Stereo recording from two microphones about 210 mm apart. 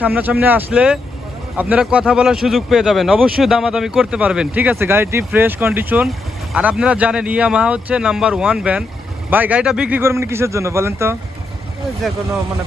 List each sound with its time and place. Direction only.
0.0 s speech: 10° right (ahead or behind)
12.0 s speech: centre (ahead or behind)